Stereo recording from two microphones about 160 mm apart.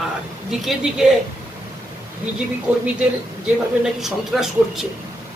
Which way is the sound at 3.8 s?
Centre (ahead or behind).